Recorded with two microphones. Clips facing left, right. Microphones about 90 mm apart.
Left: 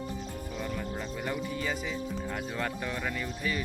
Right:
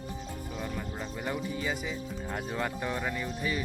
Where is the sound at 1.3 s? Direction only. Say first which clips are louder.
Even; 15° right (ahead or behind).